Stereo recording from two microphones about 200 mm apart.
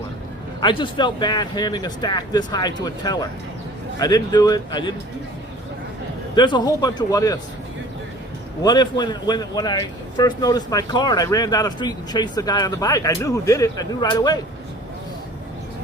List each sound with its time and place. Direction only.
0.6 s a man's voice: 25° left (ahead or behind)
6.3 s a man's voice: 20° left (ahead or behind)
8.6 s a man's voice: 20° left (ahead or behind)